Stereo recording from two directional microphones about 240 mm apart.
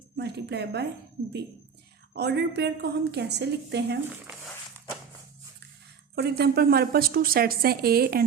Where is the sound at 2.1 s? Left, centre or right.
Right.